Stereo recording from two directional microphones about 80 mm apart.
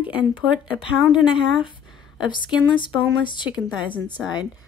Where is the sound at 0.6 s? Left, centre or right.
Left.